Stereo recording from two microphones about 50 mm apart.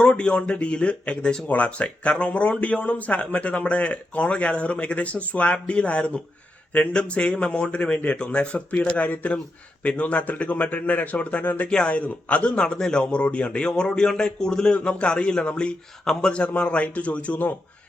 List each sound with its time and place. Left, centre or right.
0.0 s speech: left
1.5 s speech: left
11.7 s speech: centre
11.9 s speech: left